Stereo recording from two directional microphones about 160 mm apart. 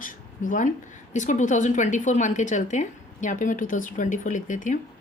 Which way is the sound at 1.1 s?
50° left (ahead or behind).